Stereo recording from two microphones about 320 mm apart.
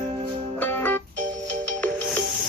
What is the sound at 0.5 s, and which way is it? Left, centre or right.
Music, centre.